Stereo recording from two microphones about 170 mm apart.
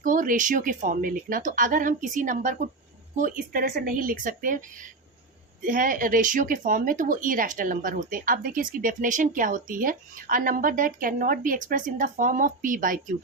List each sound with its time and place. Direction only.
0.0 s speech: 50° right (ahead or behind)
5.6 s speech: 55° right (ahead or behind)